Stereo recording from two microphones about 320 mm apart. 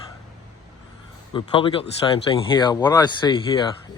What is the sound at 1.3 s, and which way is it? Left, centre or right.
Speech, centre.